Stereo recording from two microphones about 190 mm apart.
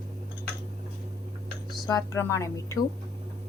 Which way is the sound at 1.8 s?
15° left (ahead or behind).